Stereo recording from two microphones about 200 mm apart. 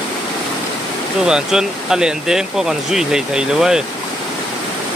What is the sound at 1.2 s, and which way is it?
Speech, 5° right (ahead or behind).